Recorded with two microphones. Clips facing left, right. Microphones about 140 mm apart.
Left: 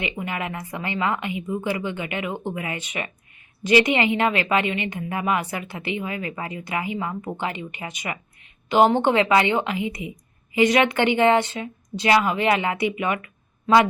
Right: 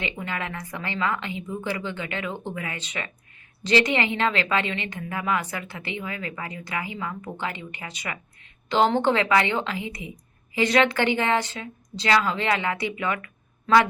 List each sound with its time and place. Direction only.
0.0 s a woman's voice: 15° left (ahead or behind)